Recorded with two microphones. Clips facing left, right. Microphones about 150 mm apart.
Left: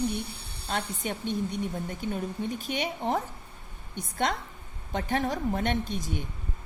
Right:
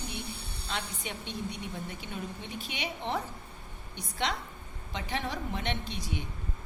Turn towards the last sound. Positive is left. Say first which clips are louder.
# left 6 dB
turn(degrees=45)  # may be behind; listen again after turning